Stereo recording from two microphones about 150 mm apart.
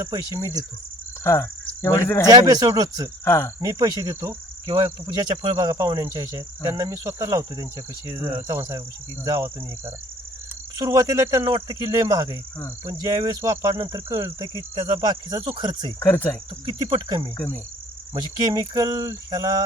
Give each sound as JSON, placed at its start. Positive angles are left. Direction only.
{"t": 0.0, "sound": "cricket", "side_deg": -20}
{"t": 1.2, "sound": "speech", "side_deg": 15}
{"t": 2.3, "sound": "cricket", "side_deg": -25}
{"t": 3.2, "sound": "cricket", "side_deg": 15}
{"t": 3.8, "sound": "cricket", "side_deg": -25}
{"t": 5.5, "sound": "cricket", "side_deg": -25}
{"t": 16.0, "sound": "cricket", "side_deg": 15}
{"t": 16.6, "sound": "cricket", "side_deg": -30}
{"t": 17.3, "sound": "cricket", "side_deg": 15}
{"t": 18.2, "sound": "cricket", "side_deg": -25}